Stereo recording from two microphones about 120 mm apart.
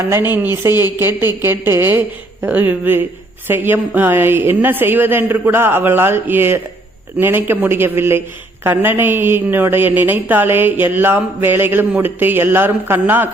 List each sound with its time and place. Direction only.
0.4 s a man's voice: 20° right (ahead or behind)